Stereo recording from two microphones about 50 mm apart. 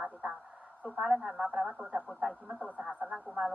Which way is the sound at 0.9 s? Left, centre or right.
Centre.